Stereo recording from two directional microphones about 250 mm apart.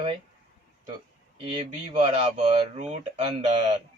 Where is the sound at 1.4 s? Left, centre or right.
Right.